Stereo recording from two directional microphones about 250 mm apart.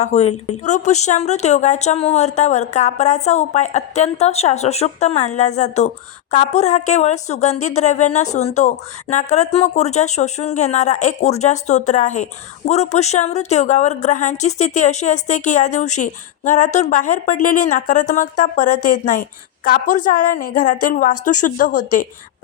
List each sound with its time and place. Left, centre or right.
0.0 s a woman's voice: left